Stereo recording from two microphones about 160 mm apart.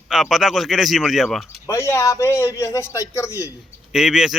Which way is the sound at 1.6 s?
15° left (ahead or behind).